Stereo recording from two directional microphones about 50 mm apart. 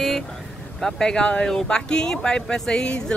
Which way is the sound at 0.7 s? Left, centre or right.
Centre.